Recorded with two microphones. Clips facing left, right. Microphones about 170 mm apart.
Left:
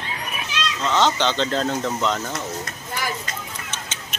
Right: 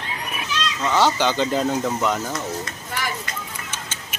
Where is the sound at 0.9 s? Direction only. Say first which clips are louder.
Right 1 dB; 10° right (ahead or behind).